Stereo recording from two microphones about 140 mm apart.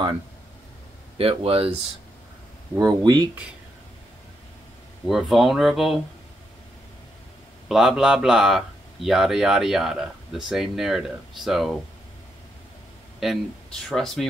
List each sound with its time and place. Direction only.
1.1 s speech: 45° right (ahead or behind)
2.7 s speech: 30° right (ahead or behind)
5.0 s speech: centre (ahead or behind)
7.6 s speech: 5° right (ahead or behind)
13.2 s speech: centre (ahead or behind)